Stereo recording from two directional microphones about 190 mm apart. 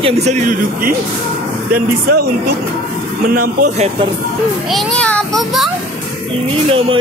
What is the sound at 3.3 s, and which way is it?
Speech, 50° right (ahead or behind).